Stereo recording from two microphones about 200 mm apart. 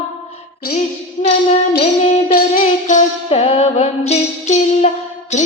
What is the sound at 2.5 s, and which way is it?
Music, 40° left (ahead or behind).